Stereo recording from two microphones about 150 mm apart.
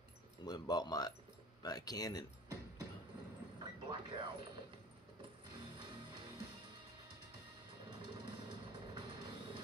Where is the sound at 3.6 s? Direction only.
30° right (ahead or behind).